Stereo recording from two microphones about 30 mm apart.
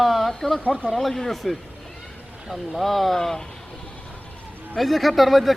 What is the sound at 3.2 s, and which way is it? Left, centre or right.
Speech, centre.